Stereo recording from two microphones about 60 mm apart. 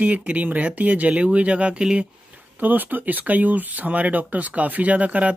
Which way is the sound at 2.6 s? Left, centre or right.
Right.